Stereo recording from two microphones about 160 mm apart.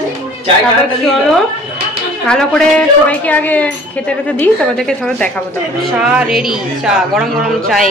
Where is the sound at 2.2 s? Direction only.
5° left (ahead or behind).